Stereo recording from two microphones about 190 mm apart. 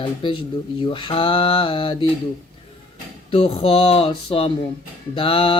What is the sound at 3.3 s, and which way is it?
Speech, 30° left (ahead or behind).